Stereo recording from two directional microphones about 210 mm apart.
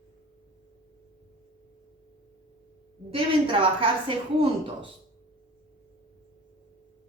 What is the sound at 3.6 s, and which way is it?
Speech, 25° right (ahead or behind).